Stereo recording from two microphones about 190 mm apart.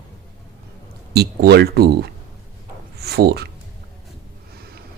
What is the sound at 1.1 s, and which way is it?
Speech, 55° right (ahead or behind).